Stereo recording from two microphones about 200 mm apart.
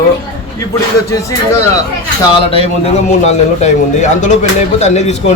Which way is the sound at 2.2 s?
30° left (ahead or behind).